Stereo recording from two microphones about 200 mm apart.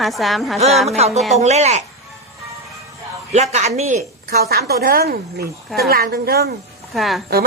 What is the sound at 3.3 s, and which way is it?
Speech, 35° right (ahead or behind).